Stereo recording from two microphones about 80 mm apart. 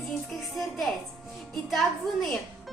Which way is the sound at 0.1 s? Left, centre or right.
Centre.